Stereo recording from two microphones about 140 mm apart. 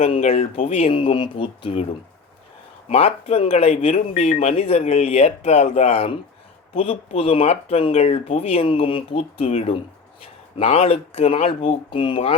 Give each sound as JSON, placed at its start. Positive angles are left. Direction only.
{"t": 0.0, "sound": "speech", "side_deg": 45}
{"t": 2.9, "sound": "speech", "side_deg": 45}